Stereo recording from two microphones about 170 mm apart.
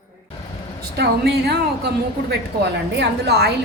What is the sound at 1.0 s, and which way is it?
A woman's voice, 70° right (ahead or behind).